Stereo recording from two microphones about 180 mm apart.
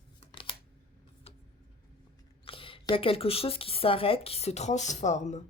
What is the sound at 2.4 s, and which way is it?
Speech, 30° left (ahead or behind).